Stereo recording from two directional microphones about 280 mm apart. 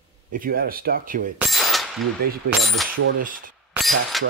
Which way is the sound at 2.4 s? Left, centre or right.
Centre.